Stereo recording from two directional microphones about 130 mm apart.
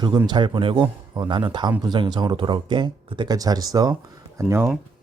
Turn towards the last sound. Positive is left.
turn(degrees=-20)  # may be behind; listen again after turning